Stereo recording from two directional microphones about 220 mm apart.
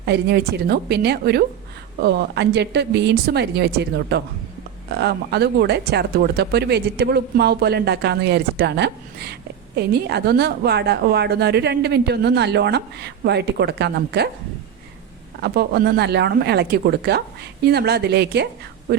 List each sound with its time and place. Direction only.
0.0 s speech: 50° right (ahead or behind)
15.4 s speech: 45° right (ahead or behind)